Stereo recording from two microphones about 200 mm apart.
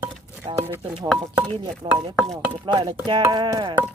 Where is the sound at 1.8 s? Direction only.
25° right (ahead or behind).